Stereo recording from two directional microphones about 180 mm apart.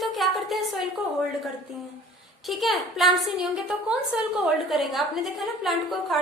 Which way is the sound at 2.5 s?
Centre (ahead or behind).